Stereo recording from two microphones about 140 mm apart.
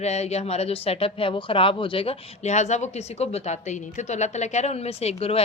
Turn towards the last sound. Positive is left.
turn(degrees=45)  # may be behind; listen again after turning